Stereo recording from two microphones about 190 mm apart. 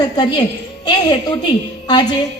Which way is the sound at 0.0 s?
20° left (ahead or behind).